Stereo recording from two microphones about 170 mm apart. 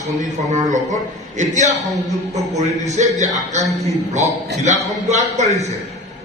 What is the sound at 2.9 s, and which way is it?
A man's voice, 45° right (ahead or behind).